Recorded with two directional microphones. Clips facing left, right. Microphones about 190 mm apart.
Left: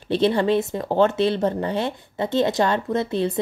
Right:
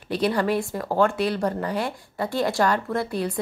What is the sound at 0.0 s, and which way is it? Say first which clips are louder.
Speech: left 4 dB; 25° left (ahead or behind).